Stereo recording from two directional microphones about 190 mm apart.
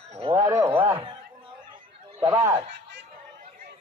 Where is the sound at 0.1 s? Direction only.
30° right (ahead or behind).